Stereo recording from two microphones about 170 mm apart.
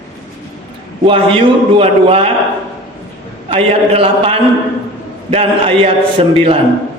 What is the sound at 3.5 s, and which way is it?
Speech, 35° right (ahead or behind).